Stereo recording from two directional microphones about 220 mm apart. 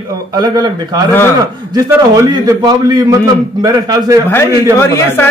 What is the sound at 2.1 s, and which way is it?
Speech, 15° right (ahead or behind).